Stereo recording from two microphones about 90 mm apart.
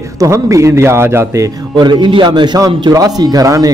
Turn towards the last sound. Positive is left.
turn(degrees=-40)  # may be behind; listen again after turning